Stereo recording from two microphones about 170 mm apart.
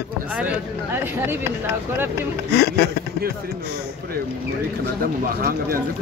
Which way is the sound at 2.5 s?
70° left (ahead or behind).